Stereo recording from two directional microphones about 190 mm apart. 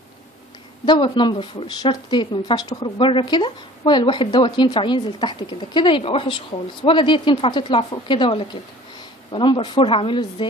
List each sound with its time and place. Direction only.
0.8 s speech: 25° left (ahead or behind)